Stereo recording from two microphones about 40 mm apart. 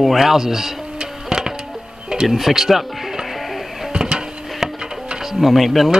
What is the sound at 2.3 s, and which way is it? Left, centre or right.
Speech, centre.